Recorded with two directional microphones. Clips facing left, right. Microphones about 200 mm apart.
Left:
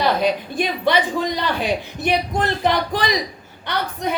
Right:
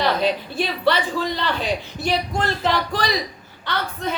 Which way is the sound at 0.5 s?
15° left (ahead or behind).